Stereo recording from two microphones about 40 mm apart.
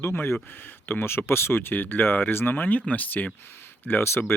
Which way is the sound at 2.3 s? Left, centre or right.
Left.